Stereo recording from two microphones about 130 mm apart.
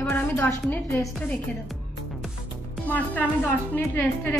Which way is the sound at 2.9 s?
10° left (ahead or behind).